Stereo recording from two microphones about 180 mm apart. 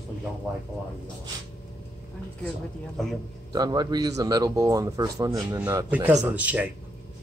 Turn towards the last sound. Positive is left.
turn(degrees=-10)  # may be behind; listen again after turning